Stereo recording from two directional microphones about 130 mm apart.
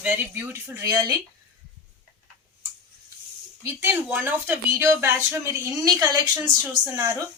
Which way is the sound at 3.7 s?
15° right (ahead or behind).